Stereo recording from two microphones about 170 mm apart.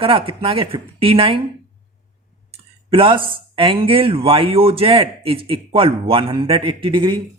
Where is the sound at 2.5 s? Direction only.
30° right (ahead or behind).